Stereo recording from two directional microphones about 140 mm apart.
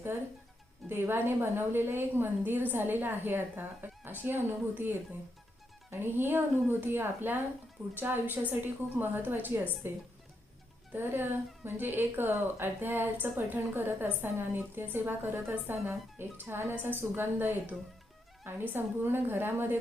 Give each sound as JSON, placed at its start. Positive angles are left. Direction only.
{"t": 0.9, "sound": "a woman's voice", "side_deg": -15}
{"t": 10.9, "sound": "a woman's voice", "side_deg": -15}